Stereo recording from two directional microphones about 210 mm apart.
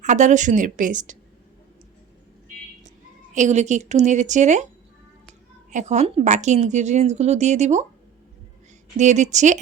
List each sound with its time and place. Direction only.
0.0 s a woman's voice: 35° right (ahead or behind)
3.3 s a woman's voice: 35° right (ahead or behind)
5.7 s a woman's voice: 35° right (ahead or behind)
9.0 s a woman's voice: 35° right (ahead or behind)